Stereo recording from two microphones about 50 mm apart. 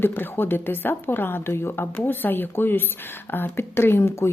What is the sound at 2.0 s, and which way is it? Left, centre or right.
A woman's voice, left.